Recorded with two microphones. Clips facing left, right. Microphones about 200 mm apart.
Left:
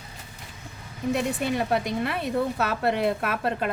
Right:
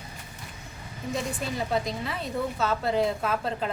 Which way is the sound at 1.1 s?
65° left (ahead or behind).